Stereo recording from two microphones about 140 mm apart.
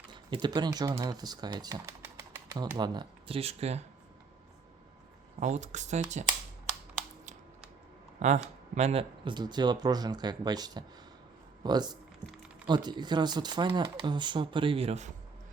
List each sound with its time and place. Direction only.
0.1 s speech: 35° right (ahead or behind)
2.7 s speech: 30° right (ahead or behind); by 3.8 s 50° right (ahead or behind)
5.4 s speech: 55° right (ahead or behind)
8.2 s speech: 55° right (ahead or behind); by 11.9 s 30° right (ahead or behind)
12.2 s a sound: centre (ahead or behind)
12.6 s speech: 30° right (ahead or behind); by 15.1 s 50° right (ahead or behind)